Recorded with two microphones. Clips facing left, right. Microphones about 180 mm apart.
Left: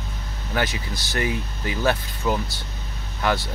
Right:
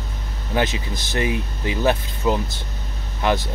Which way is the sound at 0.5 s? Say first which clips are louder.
Right 4 dB; 20° right (ahead or behind).